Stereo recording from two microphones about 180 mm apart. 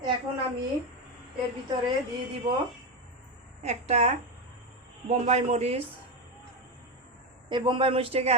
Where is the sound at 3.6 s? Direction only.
35° right (ahead or behind).